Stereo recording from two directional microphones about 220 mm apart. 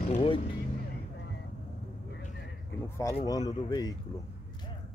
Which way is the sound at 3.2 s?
15° left (ahead or behind).